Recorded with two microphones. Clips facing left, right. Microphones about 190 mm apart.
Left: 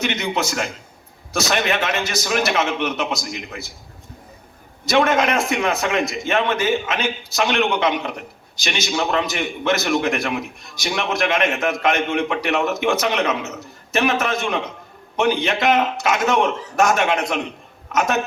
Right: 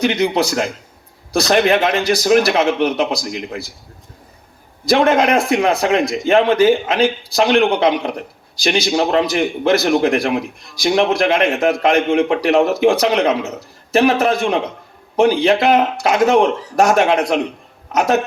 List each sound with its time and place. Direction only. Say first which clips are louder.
0.0 s a man's voice: right 7 dB; 35° right (ahead or behind)
4.9 s a man's voice: right 4 dB; 35° right (ahead or behind)